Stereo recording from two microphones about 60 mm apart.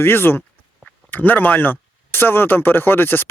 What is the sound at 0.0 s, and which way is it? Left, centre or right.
Speech, left.